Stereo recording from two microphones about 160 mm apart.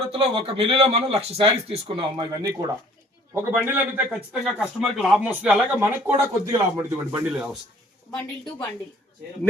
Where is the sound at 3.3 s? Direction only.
15° right (ahead or behind).